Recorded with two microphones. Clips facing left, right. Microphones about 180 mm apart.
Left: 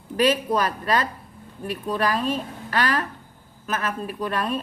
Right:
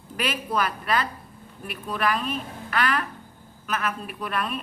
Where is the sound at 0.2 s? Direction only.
40° left (ahead or behind).